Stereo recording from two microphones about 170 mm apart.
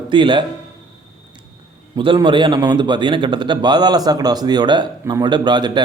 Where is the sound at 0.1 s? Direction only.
30° right (ahead or behind).